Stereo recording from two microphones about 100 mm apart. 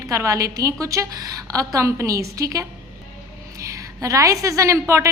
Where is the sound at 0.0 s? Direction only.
30° right (ahead or behind).